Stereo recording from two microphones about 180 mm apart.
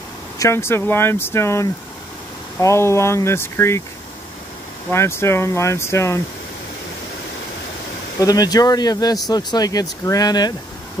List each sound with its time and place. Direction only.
0.4 s speech: 15° left (ahead or behind)
4.9 s speech: 15° left (ahead or behind)
8.2 s speech: 20° left (ahead or behind)